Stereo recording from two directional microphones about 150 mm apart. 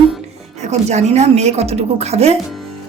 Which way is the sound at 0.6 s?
50° right (ahead or behind).